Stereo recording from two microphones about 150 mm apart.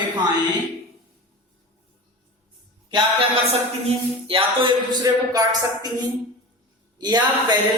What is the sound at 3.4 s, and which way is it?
Speech, 40° right (ahead or behind).